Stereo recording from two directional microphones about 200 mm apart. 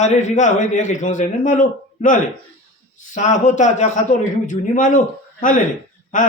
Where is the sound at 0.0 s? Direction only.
35° left (ahead or behind).